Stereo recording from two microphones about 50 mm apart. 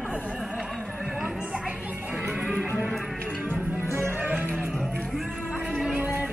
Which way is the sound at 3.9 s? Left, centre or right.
Right.